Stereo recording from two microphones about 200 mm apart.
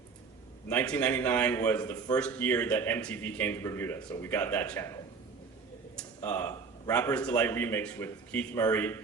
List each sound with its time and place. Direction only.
0.7 s a man's voice: 5° left (ahead or behind)
6.0 s a man's voice: 10° left (ahead or behind)